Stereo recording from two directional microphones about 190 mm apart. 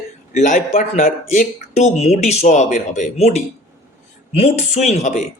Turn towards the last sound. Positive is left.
turn(degrees=40)  # may be behind; listen again after turning